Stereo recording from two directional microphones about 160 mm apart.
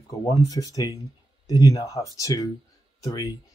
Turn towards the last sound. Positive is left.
turn(degrees=25)  # may be behind; listen again after turning